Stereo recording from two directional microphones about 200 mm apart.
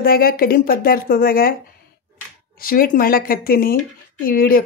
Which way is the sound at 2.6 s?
45° left (ahead or behind).